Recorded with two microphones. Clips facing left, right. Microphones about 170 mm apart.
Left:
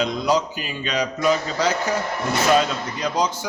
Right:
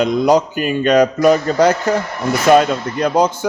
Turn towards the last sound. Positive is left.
turn(degrees=-55)  # may be behind; listen again after turning